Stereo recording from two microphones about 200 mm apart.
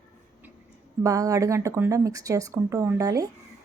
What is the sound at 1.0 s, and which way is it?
Speech, 15° right (ahead or behind).